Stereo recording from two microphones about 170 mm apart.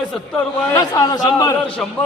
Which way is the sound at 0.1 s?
5° left (ahead or behind).